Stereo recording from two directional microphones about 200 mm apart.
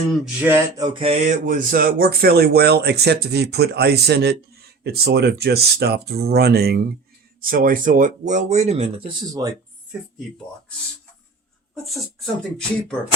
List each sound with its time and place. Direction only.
0.1 s a sound: 10° right (ahead or behind)
0.9 s speech: 30° right (ahead or behind)
9.9 s speech: 5° right (ahead or behind)
11.7 s speech: centre (ahead or behind)